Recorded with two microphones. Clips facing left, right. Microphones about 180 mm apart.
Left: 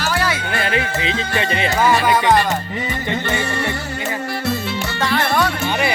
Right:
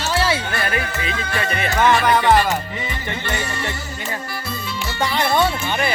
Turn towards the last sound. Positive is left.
turn(degrees=-20)  # may be behind; listen again after turning